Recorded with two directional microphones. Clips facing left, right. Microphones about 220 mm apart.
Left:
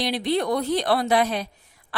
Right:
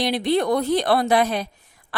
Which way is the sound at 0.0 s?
50° right (ahead or behind).